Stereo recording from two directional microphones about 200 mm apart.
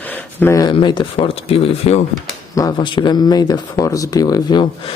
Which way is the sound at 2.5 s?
20° left (ahead or behind).